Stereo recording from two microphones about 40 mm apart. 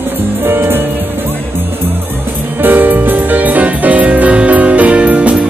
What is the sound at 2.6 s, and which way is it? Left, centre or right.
Music, right.